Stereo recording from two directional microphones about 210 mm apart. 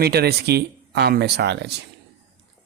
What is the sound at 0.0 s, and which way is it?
Speech, 50° right (ahead or behind).